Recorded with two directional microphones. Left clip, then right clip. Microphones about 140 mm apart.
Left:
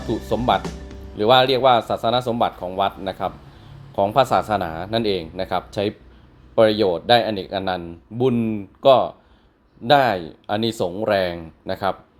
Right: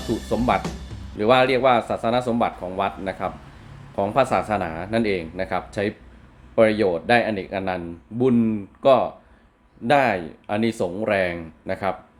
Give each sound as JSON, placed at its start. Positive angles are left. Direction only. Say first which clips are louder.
{"t": 0.3, "sound": "speech", "louder": "left 2 dB", "side_deg": 15}